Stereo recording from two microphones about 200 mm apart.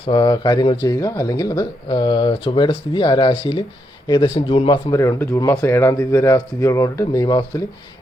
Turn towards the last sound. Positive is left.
turn(degrees=20)  # may be behind; listen again after turning